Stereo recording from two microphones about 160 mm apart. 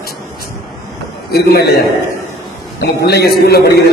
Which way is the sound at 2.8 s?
90° left.